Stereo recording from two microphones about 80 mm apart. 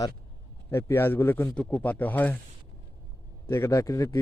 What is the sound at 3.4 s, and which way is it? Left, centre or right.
Speech, left.